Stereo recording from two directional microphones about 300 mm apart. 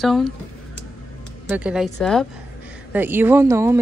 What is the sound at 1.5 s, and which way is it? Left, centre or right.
Speech, centre.